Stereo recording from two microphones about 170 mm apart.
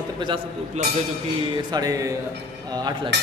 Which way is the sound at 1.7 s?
20° right (ahead or behind).